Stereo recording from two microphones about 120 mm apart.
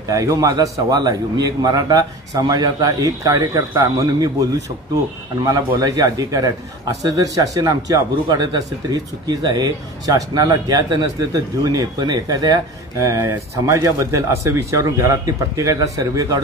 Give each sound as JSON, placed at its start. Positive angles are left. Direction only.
{"t": 0.1, "sound": "a man's voice", "side_deg": -30}
{"t": 5.8, "sound": "a man's voice", "side_deg": -30}